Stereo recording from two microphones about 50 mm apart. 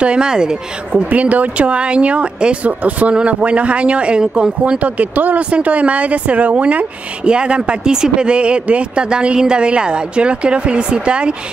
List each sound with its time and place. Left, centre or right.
0.0 s speech: centre
1.1 s speech: right